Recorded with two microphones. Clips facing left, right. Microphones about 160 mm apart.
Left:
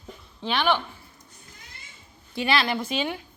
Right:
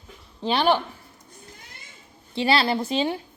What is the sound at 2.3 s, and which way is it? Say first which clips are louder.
Speech: right 3 dB; 30° right (ahead or behind).